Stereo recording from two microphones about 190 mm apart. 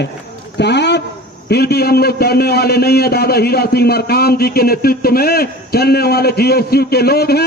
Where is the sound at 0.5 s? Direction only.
65° left (ahead or behind).